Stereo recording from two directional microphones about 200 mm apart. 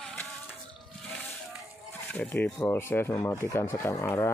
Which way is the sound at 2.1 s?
10° left (ahead or behind).